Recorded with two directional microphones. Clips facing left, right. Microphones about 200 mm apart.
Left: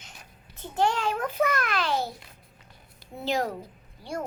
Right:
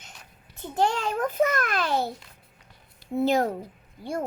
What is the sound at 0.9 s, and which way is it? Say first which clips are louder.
A child's voice: right 1 dB; 40° right (ahead or behind).